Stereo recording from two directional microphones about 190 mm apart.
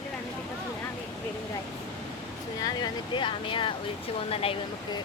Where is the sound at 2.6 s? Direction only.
25° left (ahead or behind).